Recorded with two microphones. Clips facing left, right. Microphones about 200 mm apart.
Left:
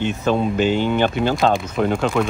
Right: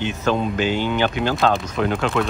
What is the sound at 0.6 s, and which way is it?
Speech, 50° left (ahead or behind).